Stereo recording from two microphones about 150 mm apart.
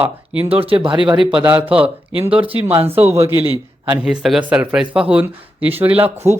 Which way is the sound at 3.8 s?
10° right (ahead or behind).